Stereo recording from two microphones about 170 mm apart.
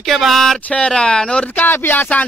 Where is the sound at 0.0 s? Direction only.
Centre (ahead or behind).